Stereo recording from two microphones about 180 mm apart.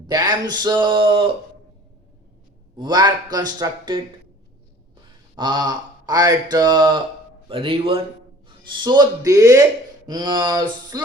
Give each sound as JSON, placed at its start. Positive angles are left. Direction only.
{"t": 0.1, "sound": "speech", "side_deg": -20}
{"t": 2.7, "sound": "speech", "side_deg": -25}
{"t": 5.4, "sound": "speech", "side_deg": -25}